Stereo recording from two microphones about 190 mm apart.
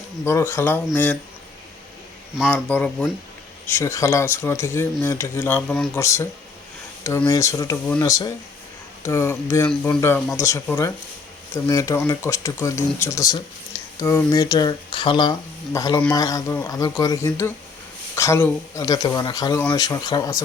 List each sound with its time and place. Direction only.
0.3 s speech: 15° left (ahead or behind)
2.5 s speech: 5° left (ahead or behind)